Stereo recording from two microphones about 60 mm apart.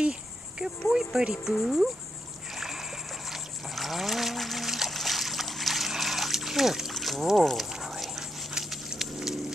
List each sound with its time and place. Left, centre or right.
0.0 s insect: centre
1.3 s cricket: centre
2.5 s splash: centre
3.3 s trickle: centre